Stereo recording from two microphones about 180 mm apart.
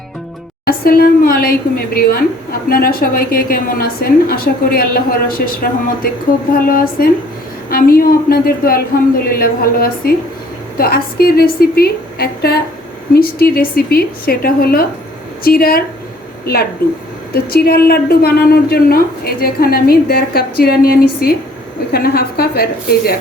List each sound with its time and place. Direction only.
0.6 s speech: 55° left (ahead or behind)
6.7 s a woman's voice: 50° left (ahead or behind)
17.3 s speech: 60° left (ahead or behind)